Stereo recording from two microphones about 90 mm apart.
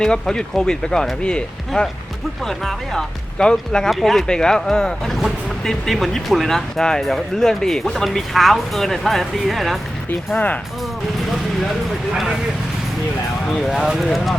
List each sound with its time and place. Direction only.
0.0 s speech: 5° left (ahead or behind)
10.3 s speech: 20° left (ahead or behind)
13.7 s speech: 5° right (ahead or behind)